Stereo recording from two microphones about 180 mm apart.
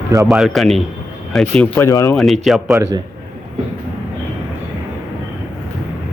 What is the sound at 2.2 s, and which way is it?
Speech, centre (ahead or behind).